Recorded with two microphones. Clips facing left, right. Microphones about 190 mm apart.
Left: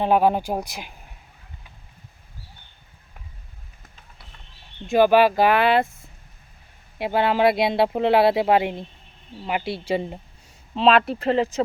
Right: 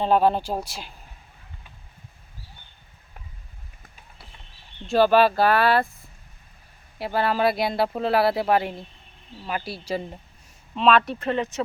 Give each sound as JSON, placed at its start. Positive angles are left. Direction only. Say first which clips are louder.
{"t": 0.0, "sound": "speech", "louder": "left 1 dB", "side_deg": 15}
{"t": 4.9, "sound": "speech", "louder": "left 2 dB", "side_deg": 15}
{"t": 7.0, "sound": "speech", "louder": "left 3 dB", "side_deg": 20}